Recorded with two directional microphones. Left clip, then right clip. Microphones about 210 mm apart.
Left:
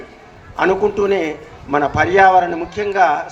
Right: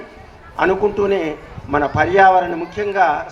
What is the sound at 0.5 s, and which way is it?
A man's voice, 25° left (ahead or behind).